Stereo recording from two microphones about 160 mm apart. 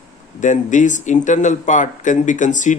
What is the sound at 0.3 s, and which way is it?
Speech, 50° left (ahead or behind).